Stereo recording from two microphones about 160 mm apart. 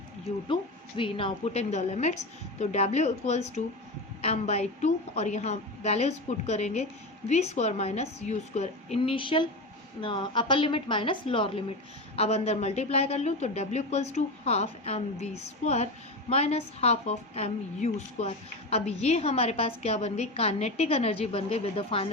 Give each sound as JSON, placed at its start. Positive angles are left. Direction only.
{"t": 0.3, "sound": "a woman's voice", "side_deg": 30}